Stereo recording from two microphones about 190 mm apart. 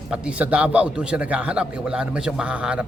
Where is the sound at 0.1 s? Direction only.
5° right (ahead or behind).